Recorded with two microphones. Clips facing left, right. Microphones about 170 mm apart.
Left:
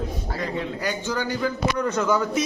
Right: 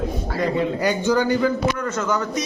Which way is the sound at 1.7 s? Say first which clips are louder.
Left 1 dB; 15° left (ahead or behind).